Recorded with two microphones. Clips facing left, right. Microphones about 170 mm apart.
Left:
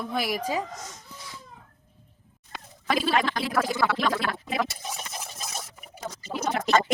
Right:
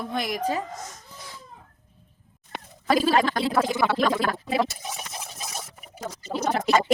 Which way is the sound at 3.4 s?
25° right (ahead or behind).